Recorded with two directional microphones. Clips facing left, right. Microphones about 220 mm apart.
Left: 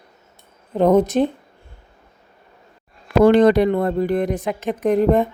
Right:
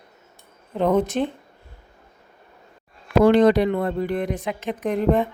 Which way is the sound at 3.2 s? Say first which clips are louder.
Left 3 dB; 50° left (ahead or behind).